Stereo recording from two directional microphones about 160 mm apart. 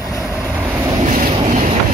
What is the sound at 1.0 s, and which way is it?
Vehicle, 50° right (ahead or behind).